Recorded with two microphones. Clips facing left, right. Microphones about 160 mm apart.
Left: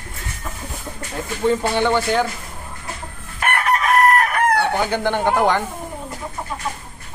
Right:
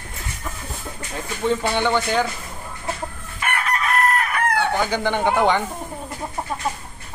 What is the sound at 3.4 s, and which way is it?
Chicken, 65° left (ahead or behind).